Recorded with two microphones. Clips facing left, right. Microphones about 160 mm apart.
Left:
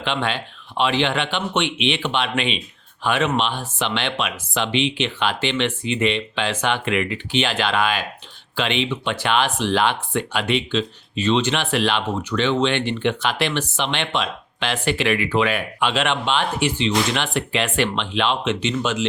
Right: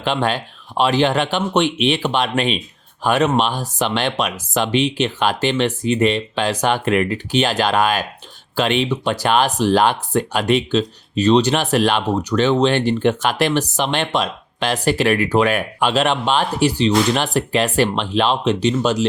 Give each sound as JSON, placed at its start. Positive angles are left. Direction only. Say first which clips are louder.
{"t": 0.0, "sound": "speech", "louder": "right 4 dB", "side_deg": -40}